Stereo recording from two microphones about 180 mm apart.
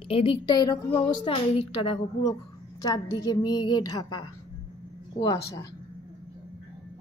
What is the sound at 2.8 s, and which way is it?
A woman's voice, 20° left (ahead or behind).